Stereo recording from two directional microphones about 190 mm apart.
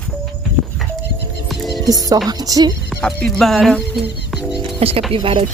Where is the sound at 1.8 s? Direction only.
20° right (ahead or behind).